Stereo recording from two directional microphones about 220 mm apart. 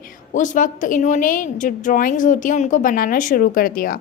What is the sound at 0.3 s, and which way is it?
A woman's voice, 35° left (ahead or behind).